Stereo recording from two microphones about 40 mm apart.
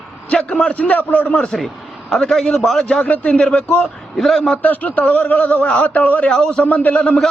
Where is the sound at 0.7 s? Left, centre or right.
Left.